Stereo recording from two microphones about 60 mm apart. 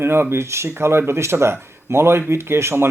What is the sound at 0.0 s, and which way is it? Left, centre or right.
Speech, right.